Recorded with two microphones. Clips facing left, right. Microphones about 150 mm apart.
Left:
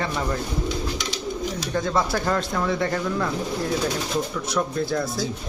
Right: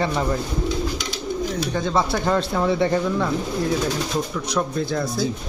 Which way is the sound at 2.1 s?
5° right (ahead or behind).